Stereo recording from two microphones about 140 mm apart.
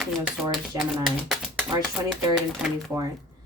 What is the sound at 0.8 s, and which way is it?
Speech, centre (ahead or behind).